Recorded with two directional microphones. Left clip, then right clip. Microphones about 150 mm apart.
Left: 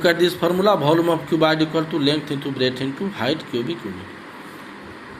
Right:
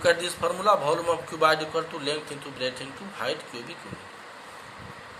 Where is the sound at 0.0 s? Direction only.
20° left (ahead or behind).